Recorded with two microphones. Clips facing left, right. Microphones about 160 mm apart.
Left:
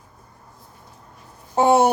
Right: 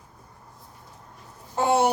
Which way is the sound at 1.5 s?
50° left (ahead or behind).